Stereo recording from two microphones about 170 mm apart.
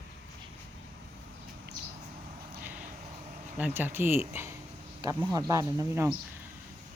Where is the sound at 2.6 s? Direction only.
10° right (ahead or behind).